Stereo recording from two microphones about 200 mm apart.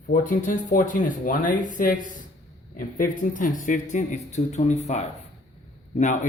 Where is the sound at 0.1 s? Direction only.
40° left (ahead or behind).